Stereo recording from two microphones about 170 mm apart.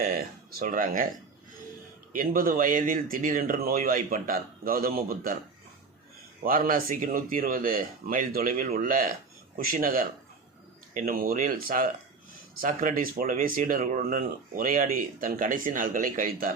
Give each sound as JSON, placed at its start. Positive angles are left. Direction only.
{"t": 0.0, "sound": "speech", "side_deg": -55}
{"t": 2.1, "sound": "speech", "side_deg": -55}
{"t": 6.4, "sound": "speech", "side_deg": -55}